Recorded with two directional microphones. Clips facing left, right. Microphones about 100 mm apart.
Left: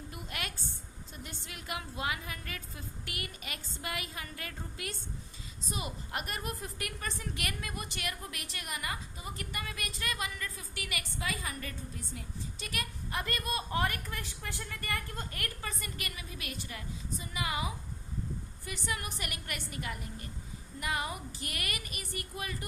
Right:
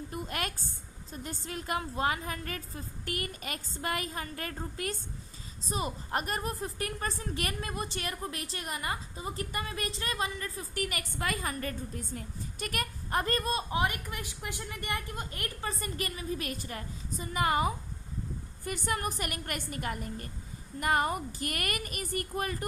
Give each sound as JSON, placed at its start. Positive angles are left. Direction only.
{"t": 0.1, "sound": "a sound", "side_deg": -45}
{"t": 1.1, "sound": "a woman's voice", "side_deg": -40}
{"t": 10.8, "sound": "a woman's voice", "side_deg": -45}
{"t": 13.7, "sound": "a woman's voice", "side_deg": -20}